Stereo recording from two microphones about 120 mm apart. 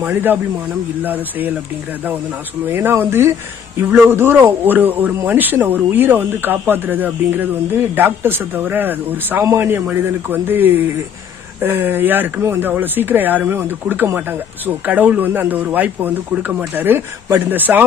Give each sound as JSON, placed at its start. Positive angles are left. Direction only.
{"t": 0.0, "sound": "speech", "side_deg": -15}
{"t": 2.7, "sound": "speech", "side_deg": -20}